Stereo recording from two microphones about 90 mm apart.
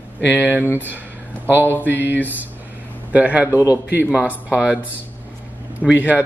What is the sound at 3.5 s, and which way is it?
Speech, 35° left (ahead or behind).